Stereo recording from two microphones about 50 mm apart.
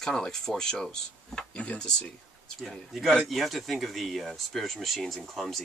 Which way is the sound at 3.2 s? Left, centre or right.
Centre.